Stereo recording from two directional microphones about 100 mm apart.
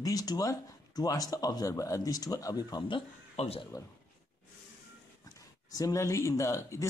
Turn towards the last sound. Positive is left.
turn(degrees=30)  # may be behind; listen again after turning